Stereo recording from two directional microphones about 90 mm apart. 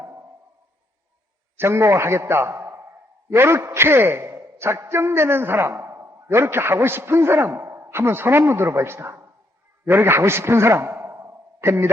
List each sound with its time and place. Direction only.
1.5 s a man's voice: 30° right (ahead or behind)